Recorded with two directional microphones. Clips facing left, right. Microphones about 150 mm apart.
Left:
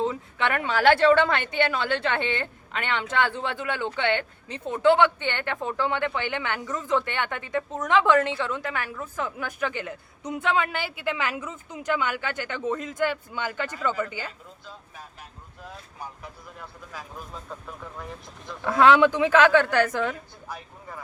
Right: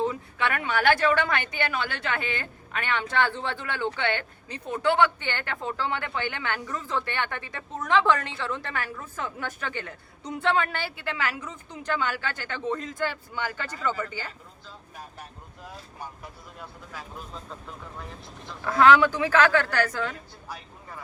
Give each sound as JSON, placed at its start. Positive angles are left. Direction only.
{"t": 0.0, "sound": "a woman's voice", "side_deg": 25}
{"t": 18.6, "sound": "a woman's voice", "side_deg": 20}